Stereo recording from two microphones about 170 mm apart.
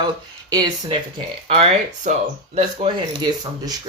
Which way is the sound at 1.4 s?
40° right (ahead or behind).